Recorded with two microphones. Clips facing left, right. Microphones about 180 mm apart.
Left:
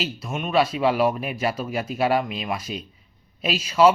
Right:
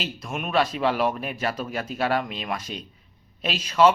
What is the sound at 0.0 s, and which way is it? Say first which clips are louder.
Speech: left 3 dB; 5° left (ahead or behind).